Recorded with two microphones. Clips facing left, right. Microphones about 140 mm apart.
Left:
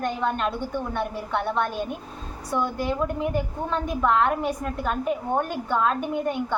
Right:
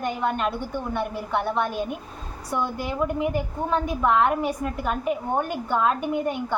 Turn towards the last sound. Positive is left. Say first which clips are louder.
# right 1 dB
turn(degrees=-5)  # may be behind; listen again after turning